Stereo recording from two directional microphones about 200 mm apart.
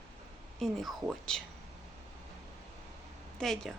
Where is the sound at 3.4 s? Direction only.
Centre (ahead or behind).